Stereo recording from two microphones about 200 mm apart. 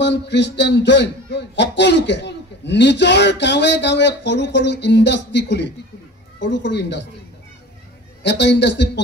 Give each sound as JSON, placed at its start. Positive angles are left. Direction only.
{"t": 0.0, "sound": "a man's voice", "side_deg": 60}
{"t": 8.2, "sound": "a man's voice", "side_deg": 60}